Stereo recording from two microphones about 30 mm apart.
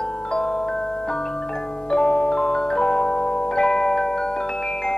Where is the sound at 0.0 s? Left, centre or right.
Left.